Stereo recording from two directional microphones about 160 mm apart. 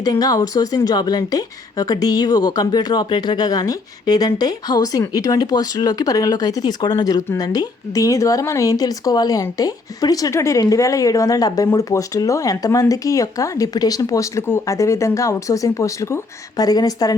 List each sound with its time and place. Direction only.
0.0 s a woman's voice: 25° left (ahead or behind)